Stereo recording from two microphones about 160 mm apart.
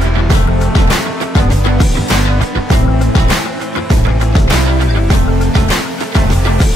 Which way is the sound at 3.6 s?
Centre (ahead or behind).